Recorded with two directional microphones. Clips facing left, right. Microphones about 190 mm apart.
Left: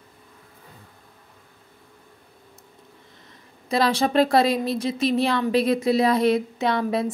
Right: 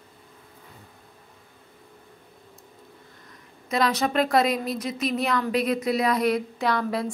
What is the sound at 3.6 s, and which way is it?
A woman's voice, 30° left (ahead or behind).